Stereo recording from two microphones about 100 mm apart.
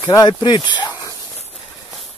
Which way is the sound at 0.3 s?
45° left (ahead or behind).